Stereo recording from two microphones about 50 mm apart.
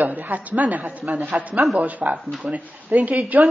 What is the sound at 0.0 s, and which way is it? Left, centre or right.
A woman's voice, right.